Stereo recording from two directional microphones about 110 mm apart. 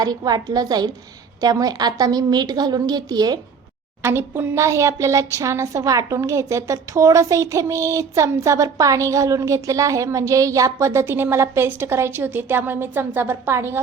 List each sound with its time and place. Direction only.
0.0 s a woman's voice: 35° right (ahead or behind)
4.0 s speech: 20° right (ahead or behind)